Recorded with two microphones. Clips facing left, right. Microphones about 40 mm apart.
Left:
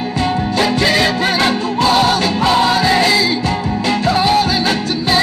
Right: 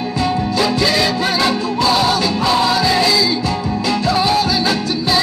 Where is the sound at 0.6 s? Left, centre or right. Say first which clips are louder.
Left 2 dB; left.